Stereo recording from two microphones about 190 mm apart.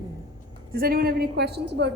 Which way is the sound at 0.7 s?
50° right (ahead or behind).